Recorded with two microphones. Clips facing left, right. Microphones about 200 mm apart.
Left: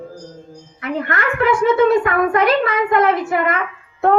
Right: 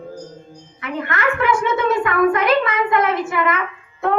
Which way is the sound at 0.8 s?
45° left (ahead or behind).